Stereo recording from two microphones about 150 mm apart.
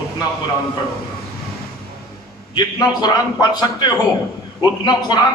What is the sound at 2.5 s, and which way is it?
A man's voice, 25° left (ahead or behind).